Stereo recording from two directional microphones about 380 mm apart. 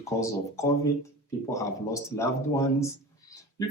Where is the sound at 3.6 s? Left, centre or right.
Centre.